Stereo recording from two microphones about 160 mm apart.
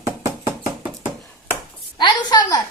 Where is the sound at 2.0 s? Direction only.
25° left (ahead or behind).